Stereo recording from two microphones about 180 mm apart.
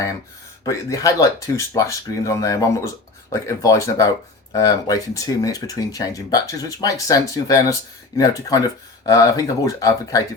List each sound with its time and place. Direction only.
0.6 s speech: 20° left (ahead or behind)